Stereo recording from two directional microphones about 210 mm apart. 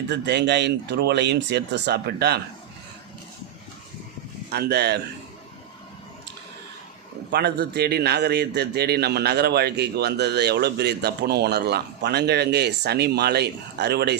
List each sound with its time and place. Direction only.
0.1 s a man's voice: 55° right (ahead or behind)
4.4 s a man's voice: 50° right (ahead or behind)
7.3 s a man's voice: 50° right (ahead or behind)